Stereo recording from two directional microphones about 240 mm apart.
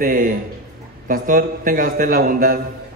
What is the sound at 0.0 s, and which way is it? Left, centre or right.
A man's voice, right.